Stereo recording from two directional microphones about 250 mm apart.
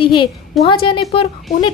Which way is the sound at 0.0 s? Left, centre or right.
Left.